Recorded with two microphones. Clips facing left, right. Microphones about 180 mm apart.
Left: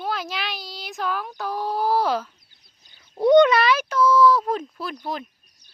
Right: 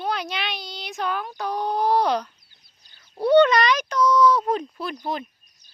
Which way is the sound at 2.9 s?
15° left (ahead or behind).